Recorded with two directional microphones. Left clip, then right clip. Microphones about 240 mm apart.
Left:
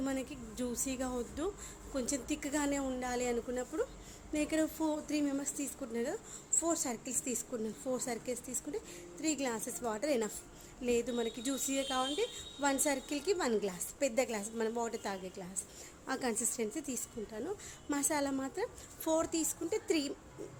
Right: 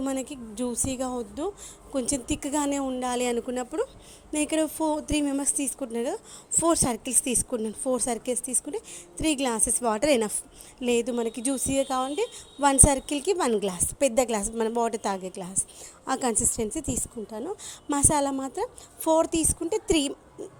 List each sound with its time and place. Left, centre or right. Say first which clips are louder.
0.0 s a woman's voice: right 7 dB; right